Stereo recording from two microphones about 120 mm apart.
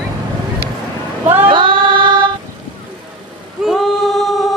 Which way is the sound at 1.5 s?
45° right (ahead or behind).